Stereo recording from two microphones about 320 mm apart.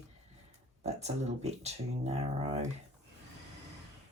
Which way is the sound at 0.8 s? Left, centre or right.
Right.